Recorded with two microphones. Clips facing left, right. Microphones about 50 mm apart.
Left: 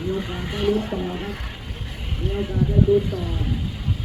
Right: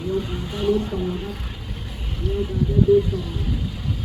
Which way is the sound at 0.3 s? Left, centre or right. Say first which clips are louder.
Left 1 dB; left.